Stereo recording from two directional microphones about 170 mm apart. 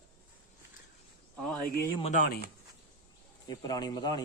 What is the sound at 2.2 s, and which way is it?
Speech, 65° left (ahead or behind).